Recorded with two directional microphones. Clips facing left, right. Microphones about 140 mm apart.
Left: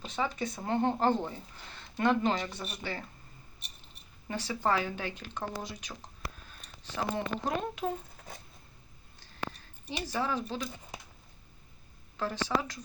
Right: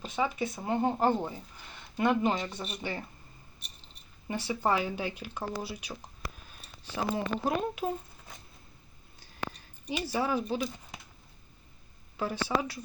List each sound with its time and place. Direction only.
0.0 s speech: 10° right (ahead or behind)
4.3 s speech: 15° right (ahead or behind)
10.0 s speech: 10° right (ahead or behind)
12.1 s speech: 10° right (ahead or behind)